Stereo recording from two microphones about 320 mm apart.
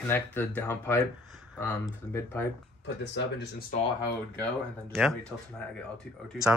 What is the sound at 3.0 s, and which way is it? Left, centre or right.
Speech, left.